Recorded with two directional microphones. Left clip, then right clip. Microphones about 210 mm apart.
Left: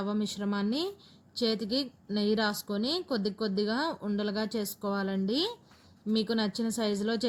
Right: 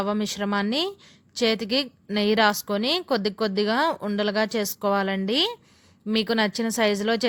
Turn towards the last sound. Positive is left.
turn(degrees=-90)